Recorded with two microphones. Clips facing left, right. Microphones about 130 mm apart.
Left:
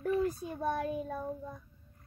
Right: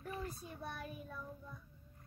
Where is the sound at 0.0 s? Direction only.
90° left; by 1.5 s 75° left (ahead or behind).